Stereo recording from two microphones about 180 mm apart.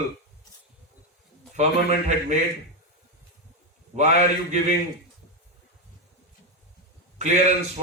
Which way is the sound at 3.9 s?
40° right (ahead or behind).